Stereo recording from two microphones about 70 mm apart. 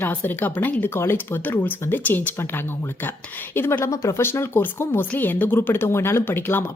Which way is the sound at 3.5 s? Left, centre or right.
Left.